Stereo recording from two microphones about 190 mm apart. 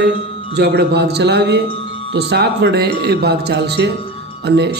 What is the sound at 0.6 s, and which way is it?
A man's voice, 60° right (ahead or behind).